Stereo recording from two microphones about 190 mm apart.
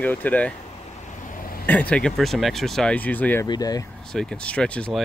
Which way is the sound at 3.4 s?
20° left (ahead or behind).